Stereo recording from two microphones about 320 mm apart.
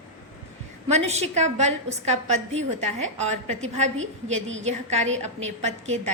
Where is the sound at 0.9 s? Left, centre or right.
Centre.